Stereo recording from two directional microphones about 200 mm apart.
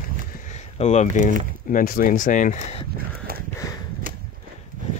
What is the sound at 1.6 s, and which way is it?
Speech, 45° left (ahead or behind).